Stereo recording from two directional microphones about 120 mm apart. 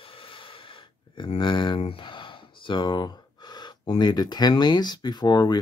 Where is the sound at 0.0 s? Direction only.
50° left (ahead or behind).